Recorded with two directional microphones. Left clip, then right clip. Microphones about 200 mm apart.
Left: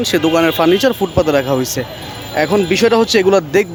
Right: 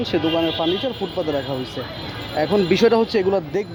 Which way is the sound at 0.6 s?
25° left (ahead or behind).